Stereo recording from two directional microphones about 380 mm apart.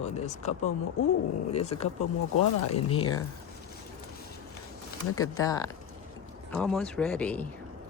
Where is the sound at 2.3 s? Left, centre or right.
Left.